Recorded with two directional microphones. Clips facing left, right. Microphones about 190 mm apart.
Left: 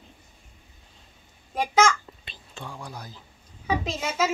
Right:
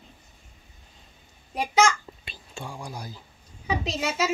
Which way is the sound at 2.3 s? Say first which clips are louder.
Right 2 dB; 10° right (ahead or behind).